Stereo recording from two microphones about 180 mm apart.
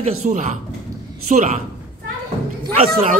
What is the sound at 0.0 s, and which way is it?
A man's voice, 40° right (ahead or behind).